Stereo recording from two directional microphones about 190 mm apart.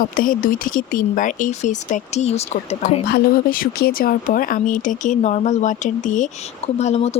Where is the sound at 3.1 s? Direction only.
50° left (ahead or behind).